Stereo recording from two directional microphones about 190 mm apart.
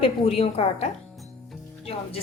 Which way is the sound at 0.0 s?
30° left (ahead or behind).